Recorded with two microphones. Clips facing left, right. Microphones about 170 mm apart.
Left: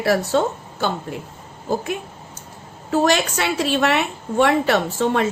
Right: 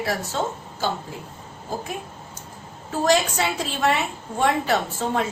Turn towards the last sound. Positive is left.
turn(degrees=75)  # may be behind; listen again after turning